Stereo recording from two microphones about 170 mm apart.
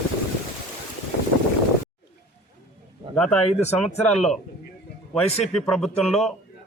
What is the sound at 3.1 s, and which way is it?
Speech, 5° left (ahead or behind).